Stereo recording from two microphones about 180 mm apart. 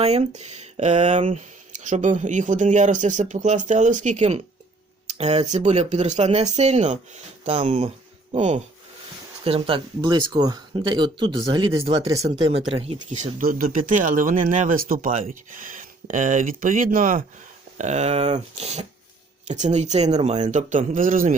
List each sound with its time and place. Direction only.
0.0 s speech: 35° right (ahead or behind)
13.4 s speech: 50° right (ahead or behind)